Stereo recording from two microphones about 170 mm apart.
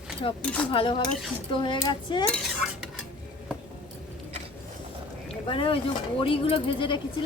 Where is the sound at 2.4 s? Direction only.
Centre (ahead or behind).